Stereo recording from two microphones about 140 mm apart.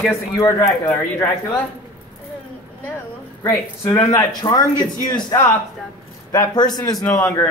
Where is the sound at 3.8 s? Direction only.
20° left (ahead or behind).